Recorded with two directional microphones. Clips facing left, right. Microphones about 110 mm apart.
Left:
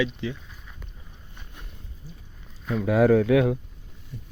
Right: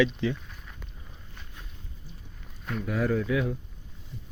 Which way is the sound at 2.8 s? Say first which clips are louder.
Left 9 dB; 90° left.